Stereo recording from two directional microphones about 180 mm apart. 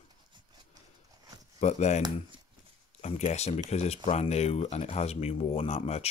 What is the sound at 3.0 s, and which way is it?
Speech, 35° left (ahead or behind).